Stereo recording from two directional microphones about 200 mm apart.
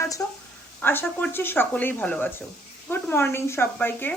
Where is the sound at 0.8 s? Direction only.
10° left (ahead or behind).